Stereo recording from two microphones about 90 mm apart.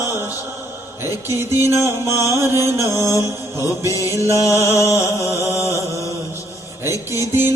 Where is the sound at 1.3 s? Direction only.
30° right (ahead or behind).